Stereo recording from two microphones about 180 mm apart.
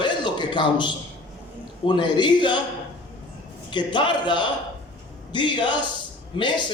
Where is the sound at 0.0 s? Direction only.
25° left (ahead or behind).